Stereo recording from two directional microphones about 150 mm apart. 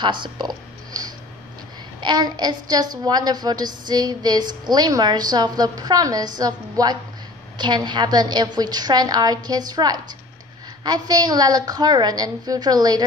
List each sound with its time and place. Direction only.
0.0 s a child's voice: 30° right (ahead or behind)